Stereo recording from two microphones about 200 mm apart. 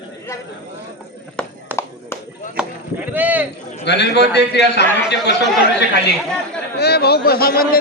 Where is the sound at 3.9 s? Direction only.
55° left (ahead or behind).